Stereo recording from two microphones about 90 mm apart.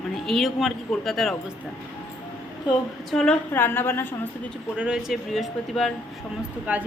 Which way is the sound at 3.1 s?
5° left (ahead or behind).